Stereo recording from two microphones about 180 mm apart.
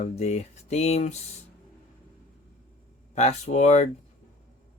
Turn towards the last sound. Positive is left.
turn(degrees=40)  # may be behind; listen again after turning